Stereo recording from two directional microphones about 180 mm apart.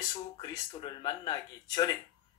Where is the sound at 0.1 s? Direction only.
25° left (ahead or behind).